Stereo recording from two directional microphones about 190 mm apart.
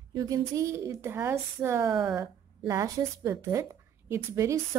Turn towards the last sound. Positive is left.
turn(degrees=-15)  # may be behind; listen again after turning